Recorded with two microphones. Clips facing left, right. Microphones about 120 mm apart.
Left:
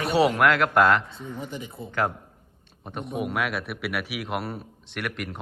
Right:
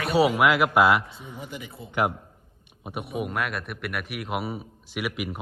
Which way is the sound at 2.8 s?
10° right (ahead or behind).